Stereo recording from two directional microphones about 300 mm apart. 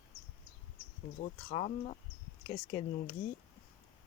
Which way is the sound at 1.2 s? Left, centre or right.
Left.